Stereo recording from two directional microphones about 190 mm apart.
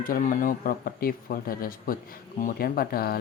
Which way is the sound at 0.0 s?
45° left (ahead or behind).